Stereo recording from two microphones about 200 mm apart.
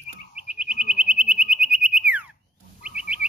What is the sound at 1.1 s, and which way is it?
Bird, 5° right (ahead or behind).